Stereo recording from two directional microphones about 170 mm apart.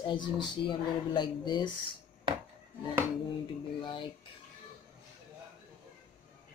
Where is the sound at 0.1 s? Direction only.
30° left (ahead or behind).